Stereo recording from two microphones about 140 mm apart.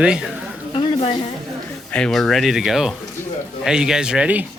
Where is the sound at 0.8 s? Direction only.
35° left (ahead or behind).